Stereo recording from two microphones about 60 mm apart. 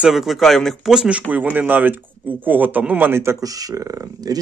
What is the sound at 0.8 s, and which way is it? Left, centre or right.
Speech, centre.